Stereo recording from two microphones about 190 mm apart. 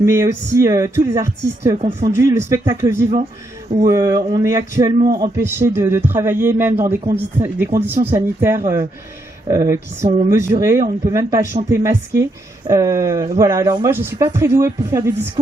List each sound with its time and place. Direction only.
0.0 s speech: 15° right (ahead or behind)
1.8 s speech: 35° right (ahead or behind)
2.1 s speech: 15° right (ahead or behind)
7.0 s speech: 30° right (ahead or behind)
7.4 s speech: 10° right (ahead or behind)